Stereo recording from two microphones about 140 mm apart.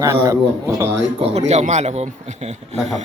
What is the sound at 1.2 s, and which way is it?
A man's voice, 50° right (ahead or behind).